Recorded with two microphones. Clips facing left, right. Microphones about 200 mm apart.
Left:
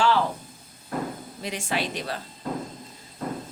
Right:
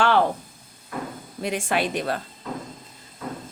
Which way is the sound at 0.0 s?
60° right (ahead or behind).